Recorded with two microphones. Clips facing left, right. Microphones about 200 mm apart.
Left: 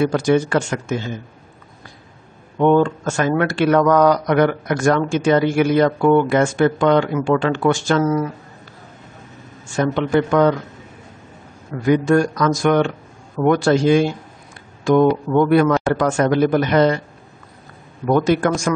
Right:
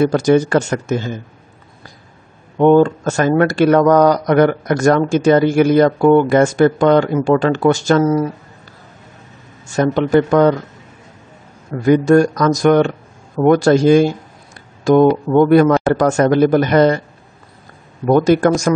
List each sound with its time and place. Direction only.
0.0 s speech: 40° right (ahead or behind)
2.6 s speech: 40° right (ahead or behind)
9.7 s speech: 40° right (ahead or behind)
11.8 s speech: 40° right (ahead or behind)
18.0 s speech: 40° right (ahead or behind)